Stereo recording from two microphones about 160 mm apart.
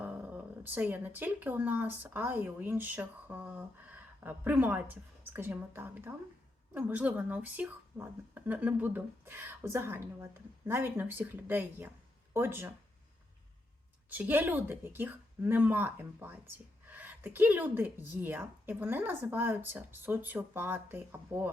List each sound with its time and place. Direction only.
0.0 s speech: 10° right (ahead or behind)
14.1 s speech: 10° right (ahead or behind)